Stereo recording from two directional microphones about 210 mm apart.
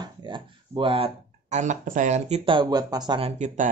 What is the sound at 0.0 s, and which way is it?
Speech, 20° right (ahead or behind).